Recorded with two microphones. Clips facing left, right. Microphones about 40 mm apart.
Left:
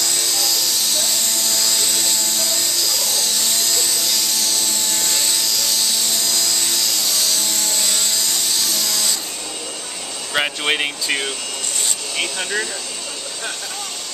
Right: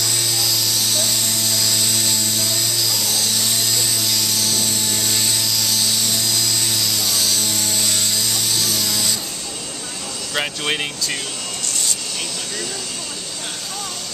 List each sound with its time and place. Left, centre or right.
0.0 s helicopter: centre
10.3 s speech: centre
12.2 s speech: left